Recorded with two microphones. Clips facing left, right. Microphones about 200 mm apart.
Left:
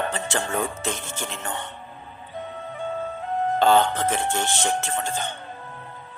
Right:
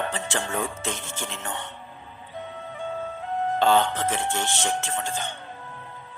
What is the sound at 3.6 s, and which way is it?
Speech, 45° left (ahead or behind).